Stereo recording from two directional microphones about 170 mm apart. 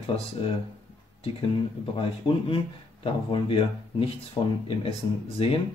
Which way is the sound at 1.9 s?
30° left (ahead or behind).